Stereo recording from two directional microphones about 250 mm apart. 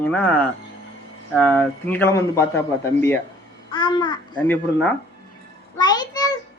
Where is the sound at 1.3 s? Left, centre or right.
Centre.